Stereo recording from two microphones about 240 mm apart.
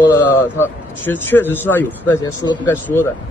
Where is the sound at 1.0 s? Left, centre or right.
Centre.